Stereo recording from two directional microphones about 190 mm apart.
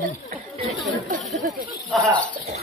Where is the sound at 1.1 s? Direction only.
40° right (ahead or behind).